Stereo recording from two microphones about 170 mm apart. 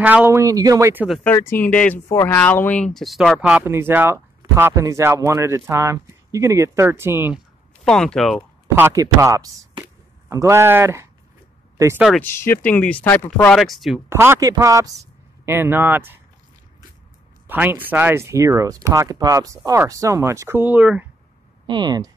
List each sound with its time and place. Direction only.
0.0 s speech: 10° right (ahead or behind)
1.2 s speech: 15° left (ahead or behind); by 7.3 s 15° right (ahead or behind)
7.8 s speech: 5° left (ahead or behind)
8.7 s speech: 15° right (ahead or behind)
12.2 s speech: 15° left (ahead or behind)
14.0 s a man's voice: 15° right (ahead or behind)
17.5 s speech: 10° right (ahead or behind)
21.6 s speech: 25° right (ahead or behind)